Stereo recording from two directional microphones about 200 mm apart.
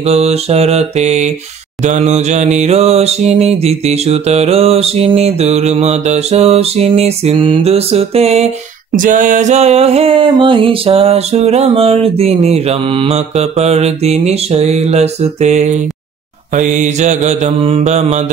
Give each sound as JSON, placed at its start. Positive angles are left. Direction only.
{"t": 0.0, "sound": "music", "side_deg": -30}